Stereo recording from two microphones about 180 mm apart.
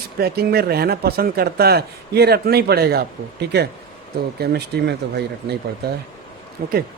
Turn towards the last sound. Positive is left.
turn(degrees=-55)  # may be behind; listen again after turning